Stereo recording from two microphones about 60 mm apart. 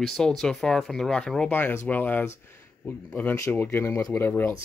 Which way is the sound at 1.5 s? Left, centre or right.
Left.